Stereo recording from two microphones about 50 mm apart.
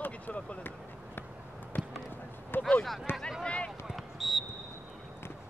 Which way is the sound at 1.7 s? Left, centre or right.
Left.